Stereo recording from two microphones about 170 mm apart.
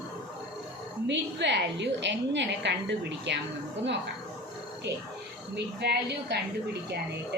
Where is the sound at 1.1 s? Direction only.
90° right.